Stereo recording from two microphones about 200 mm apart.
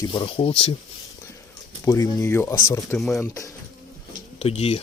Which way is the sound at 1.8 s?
15° left (ahead or behind).